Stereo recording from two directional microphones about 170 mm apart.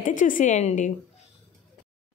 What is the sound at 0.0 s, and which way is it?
Speech, 50° left (ahead or behind).